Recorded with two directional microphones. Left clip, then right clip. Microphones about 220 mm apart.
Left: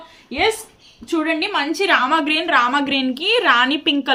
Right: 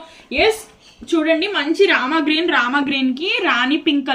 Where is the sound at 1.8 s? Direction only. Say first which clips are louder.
Right 1 dB; 45° left (ahead or behind).